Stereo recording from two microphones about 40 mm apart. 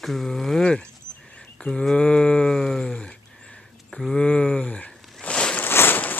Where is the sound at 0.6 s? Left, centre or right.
Left; by 4.2 s centre.